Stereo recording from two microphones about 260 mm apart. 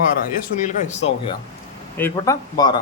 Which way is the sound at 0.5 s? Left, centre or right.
Left.